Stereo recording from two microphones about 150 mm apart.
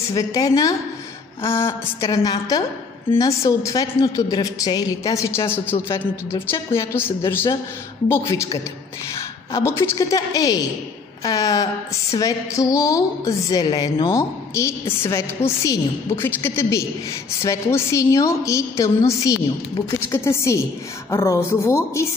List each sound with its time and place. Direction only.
0.1 s a woman's voice: 25° left (ahead or behind)
14.1 s a woman's voice: 20° left (ahead or behind)